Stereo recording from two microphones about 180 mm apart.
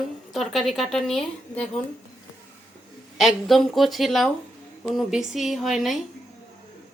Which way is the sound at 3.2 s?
Centre (ahead or behind).